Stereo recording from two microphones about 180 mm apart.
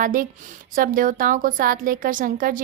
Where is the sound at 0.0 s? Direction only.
50° right (ahead or behind).